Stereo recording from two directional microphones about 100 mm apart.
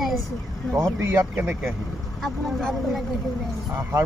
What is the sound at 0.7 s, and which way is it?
Speech, 30° right (ahead or behind).